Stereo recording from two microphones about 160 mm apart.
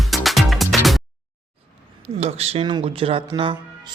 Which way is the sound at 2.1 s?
40° right (ahead or behind).